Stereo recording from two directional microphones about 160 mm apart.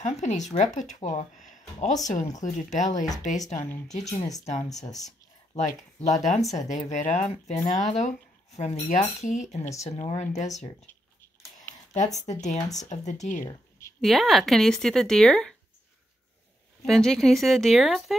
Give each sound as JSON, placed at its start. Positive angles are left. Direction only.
{"t": 0.0, "sound": "speech", "side_deg": 45}
{"t": 1.5, "sound": "a sound", "side_deg": 50}
{"t": 2.0, "sound": "speech", "side_deg": 50}
{"t": 3.5, "sound": "speech", "side_deg": 20}
{"t": 4.5, "sound": "speech", "side_deg": 45}
{"t": 4.8, "sound": "speech", "side_deg": 20}
{"t": 5.5, "sound": "speech", "side_deg": 45}
{"t": 12.3, "sound": "speech", "side_deg": 50}
{"t": 13.4, "sound": "a sound", "side_deg": 20}
{"t": 14.0, "sound": "speech", "side_deg": 0}
{"t": 16.8, "sound": "speech", "side_deg": 0}